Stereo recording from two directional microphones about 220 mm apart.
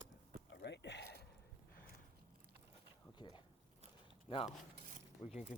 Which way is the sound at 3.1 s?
20° left (ahead or behind).